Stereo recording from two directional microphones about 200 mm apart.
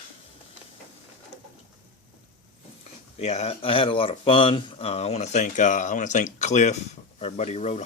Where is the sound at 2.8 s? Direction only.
35° left (ahead or behind).